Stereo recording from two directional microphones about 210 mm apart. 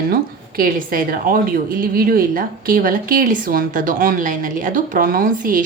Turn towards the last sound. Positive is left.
turn(degrees=-40)  # may be behind; listen again after turning